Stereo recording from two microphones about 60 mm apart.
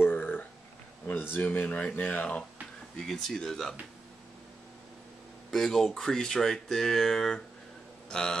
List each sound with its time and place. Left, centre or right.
0.0 s a sound: left
1.3 s speech: left
3.1 s speech: centre
5.5 s speech: centre